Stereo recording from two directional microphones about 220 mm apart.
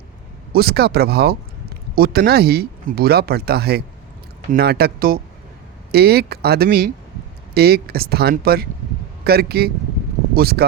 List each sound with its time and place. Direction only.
0.5 s speech: 45° right (ahead or behind)